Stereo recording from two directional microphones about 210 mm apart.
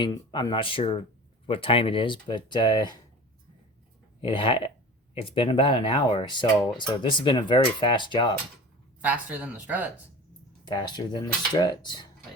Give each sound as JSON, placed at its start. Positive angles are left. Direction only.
{"t": 0.0, "sound": "speech", "side_deg": 20}
{"t": 4.2, "sound": "speech", "side_deg": 25}
{"t": 9.0, "sound": "speech", "side_deg": -5}
{"t": 10.7, "sound": "speech", "side_deg": 20}